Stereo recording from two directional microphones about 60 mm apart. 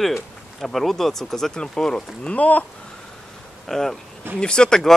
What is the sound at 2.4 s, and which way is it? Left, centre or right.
Speech, left.